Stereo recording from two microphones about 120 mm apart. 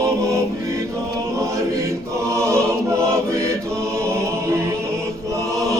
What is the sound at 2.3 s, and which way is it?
Choir, 25° right (ahead or behind).